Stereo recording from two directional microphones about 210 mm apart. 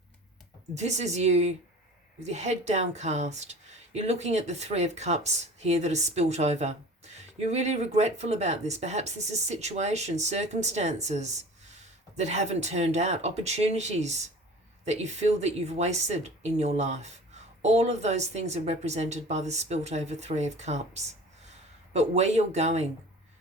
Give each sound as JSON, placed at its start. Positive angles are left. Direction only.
{"t": 0.7, "sound": "a woman's voice", "side_deg": -35}